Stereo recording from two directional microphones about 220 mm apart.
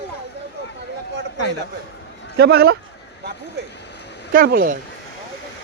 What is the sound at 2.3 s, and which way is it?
Speech, 45° right (ahead or behind).